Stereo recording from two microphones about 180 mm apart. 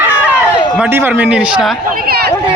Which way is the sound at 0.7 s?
10° right (ahead or behind).